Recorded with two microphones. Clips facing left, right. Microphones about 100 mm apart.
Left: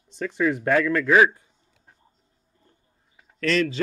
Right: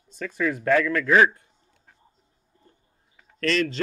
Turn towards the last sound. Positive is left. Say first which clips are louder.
# left 1 dB
turn(degrees=5)  # may be behind; listen again after turning